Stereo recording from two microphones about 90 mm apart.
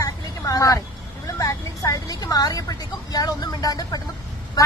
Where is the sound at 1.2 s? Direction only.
40° left (ahead or behind).